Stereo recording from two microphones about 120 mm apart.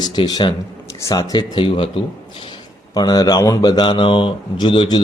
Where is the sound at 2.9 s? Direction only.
35° left (ahead or behind).